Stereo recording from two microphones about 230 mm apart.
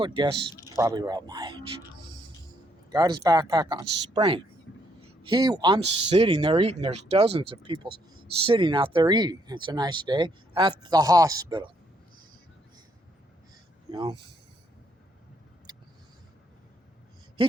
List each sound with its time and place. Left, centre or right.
0.0 s speech: centre
2.9 s speech: centre
4.7 s a sound: left
5.3 s speech: centre
13.9 s speech: centre
15.7 s vehicle: centre